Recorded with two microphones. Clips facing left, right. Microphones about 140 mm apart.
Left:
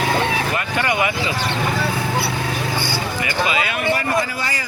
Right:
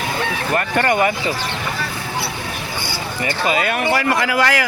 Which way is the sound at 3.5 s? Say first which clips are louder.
Right 3 dB; 45° right (ahead or behind).